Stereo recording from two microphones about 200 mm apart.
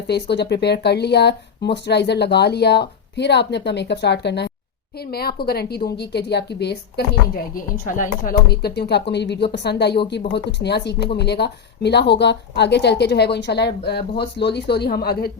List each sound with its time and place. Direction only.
0.1 s a woman's voice: 55° left (ahead or behind)